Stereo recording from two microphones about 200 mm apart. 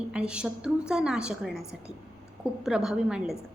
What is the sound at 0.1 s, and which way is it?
A woman's voice, 5° right (ahead or behind).